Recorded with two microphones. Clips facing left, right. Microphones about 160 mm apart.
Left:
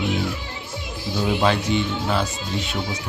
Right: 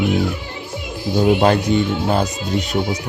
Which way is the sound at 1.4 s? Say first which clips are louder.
Right 5 dB; 45° right (ahead or behind).